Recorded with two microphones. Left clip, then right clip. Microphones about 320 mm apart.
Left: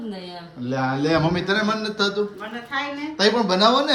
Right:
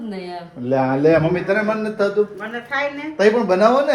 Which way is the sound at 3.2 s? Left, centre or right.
Centre.